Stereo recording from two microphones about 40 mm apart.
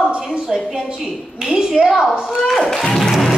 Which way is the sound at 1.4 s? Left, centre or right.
Centre.